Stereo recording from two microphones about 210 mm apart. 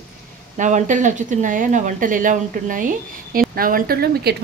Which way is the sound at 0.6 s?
35° right (ahead or behind).